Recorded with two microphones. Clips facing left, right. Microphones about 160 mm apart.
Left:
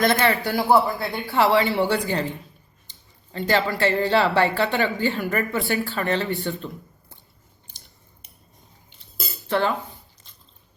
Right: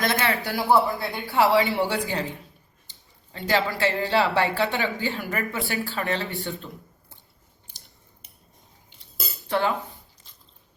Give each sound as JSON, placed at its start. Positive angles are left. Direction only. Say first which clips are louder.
{"t": 0.0, "sound": "speech", "louder": "left 5 dB", "side_deg": 0}
{"t": 3.3, "sound": "speech", "louder": "left 2 dB", "side_deg": -5}
{"t": 9.5, "sound": "speech", "louder": "left 2 dB", "side_deg": -15}